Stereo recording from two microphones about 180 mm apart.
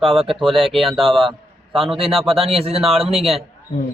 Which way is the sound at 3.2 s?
Centre (ahead or behind).